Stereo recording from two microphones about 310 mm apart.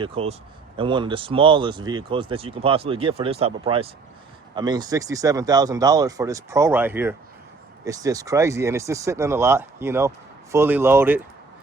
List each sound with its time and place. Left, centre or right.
0.0 s speech: centre